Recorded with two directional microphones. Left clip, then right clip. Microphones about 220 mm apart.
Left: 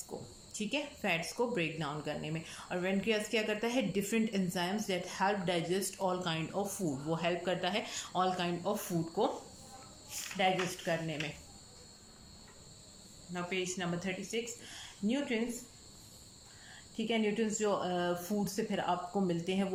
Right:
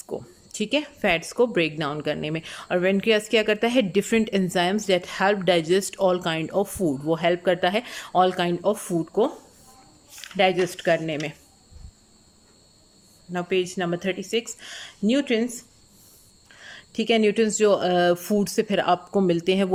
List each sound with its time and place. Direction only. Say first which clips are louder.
0.1 s speech: right 15 dB; 40° right (ahead or behind)
10.3 s speech: right 11 dB; 40° right (ahead or behind)
13.3 s speech: right 12 dB; 35° right (ahead or behind)
16.6 s speech: right 14 dB; 45° right (ahead or behind)